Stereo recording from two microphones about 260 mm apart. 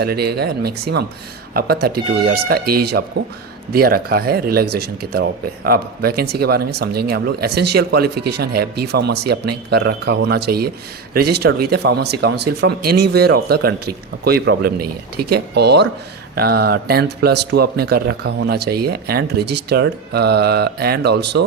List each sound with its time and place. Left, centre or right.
0.0 s speech: right